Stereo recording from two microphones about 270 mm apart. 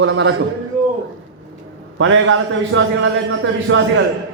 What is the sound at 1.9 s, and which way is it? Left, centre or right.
A man's voice, right.